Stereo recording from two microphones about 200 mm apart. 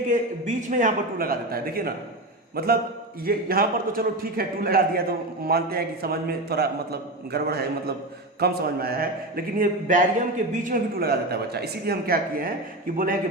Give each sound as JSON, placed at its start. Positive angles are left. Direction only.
{"t": 0.1, "sound": "a man's voice", "side_deg": -40}